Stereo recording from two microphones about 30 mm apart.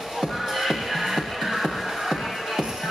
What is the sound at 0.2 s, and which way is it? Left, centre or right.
Music, centre.